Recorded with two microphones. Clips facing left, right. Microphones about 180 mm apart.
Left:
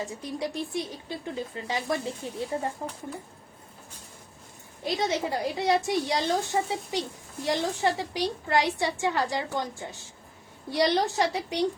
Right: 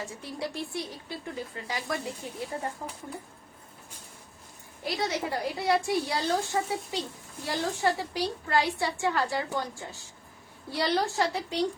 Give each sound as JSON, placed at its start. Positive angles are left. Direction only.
{"t": 0.0, "sound": "a woman's voice", "side_deg": 15}
{"t": 4.8, "sound": "a woman's voice", "side_deg": 20}